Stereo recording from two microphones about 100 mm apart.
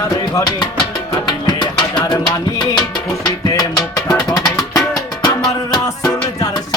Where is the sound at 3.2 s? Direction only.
35° left (ahead or behind).